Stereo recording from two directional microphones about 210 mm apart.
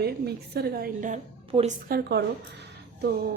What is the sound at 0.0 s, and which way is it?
A woman's voice, 50° right (ahead or behind).